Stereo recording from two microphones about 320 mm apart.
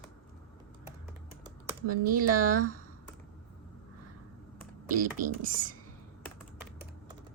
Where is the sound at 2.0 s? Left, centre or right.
Right.